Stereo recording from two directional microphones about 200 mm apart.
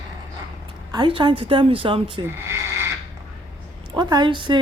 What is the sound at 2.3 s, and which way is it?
Radio, 15° right (ahead or behind).